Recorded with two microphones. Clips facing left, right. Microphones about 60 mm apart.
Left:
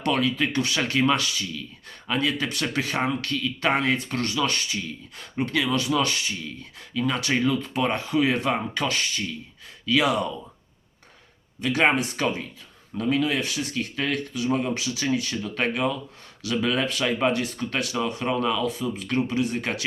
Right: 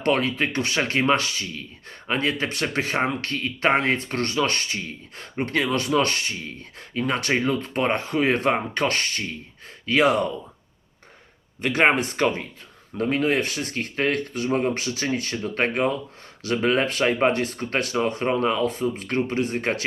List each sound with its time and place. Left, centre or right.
0.0 s speech: right
11.6 s speech: right